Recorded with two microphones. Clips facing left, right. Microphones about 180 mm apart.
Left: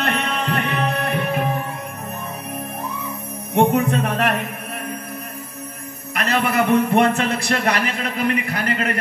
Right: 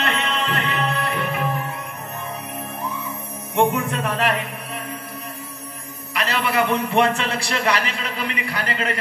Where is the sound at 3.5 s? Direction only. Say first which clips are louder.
Left 3 dB; 65° left (ahead or behind).